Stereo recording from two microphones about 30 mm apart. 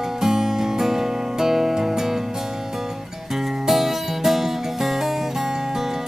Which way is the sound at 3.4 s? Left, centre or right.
Centre.